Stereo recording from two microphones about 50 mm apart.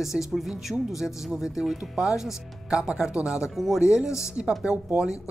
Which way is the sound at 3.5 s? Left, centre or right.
Centre.